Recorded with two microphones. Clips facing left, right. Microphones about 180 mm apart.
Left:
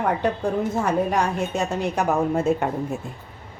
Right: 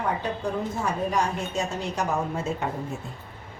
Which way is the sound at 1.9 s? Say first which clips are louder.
Left 6 dB; 55° left (ahead or behind).